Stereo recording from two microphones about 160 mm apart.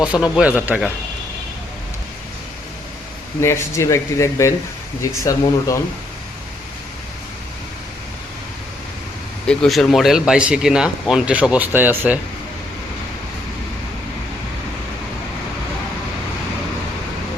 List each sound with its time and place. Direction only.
0.0 s speech: 5° right (ahead or behind)
3.4 s speech: 15° left (ahead or behind)
9.5 s speech: centre (ahead or behind)